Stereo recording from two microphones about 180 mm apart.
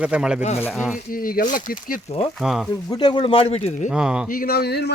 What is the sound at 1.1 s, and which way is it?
Speech, 55° left (ahead or behind).